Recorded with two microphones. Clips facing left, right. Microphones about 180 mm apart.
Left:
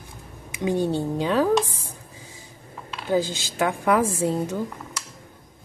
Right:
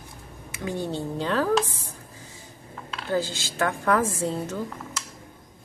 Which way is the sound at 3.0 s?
15° left (ahead or behind).